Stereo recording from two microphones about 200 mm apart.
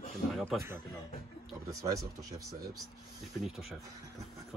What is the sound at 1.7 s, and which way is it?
Speech, 15° right (ahead or behind).